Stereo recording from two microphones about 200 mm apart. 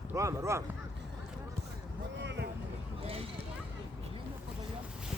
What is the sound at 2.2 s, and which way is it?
Vehicle, 60° right (ahead or behind).